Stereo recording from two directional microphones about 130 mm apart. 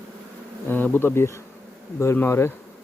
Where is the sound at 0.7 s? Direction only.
15° left (ahead or behind).